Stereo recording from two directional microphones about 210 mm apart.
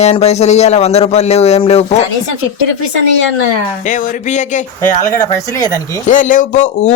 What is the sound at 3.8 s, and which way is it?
Speech, 35° left (ahead or behind).